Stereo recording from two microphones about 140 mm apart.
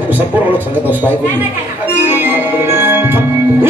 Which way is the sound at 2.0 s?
15° right (ahead or behind).